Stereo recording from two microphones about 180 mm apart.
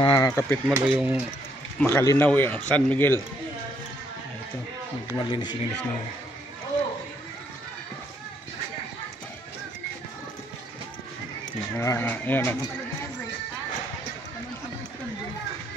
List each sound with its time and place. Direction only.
0.0 s a sound: 25° left (ahead or behind)
0.3 s speech: 10° left (ahead or behind)
0.7 s speech: 5° right (ahead or behind)
1.8 s speech: 15° left (ahead or behind)
5.1 s speech: 25° left (ahead or behind)
11.7 s speech: 15° left (ahead or behind)